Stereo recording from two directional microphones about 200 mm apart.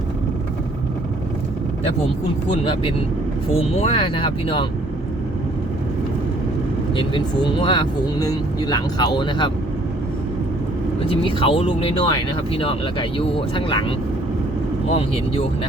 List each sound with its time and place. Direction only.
2.5 s speech: 25° left (ahead or behind)
6.9 s speech: 25° left (ahead or behind)
11.1 s speech: 25° left (ahead or behind)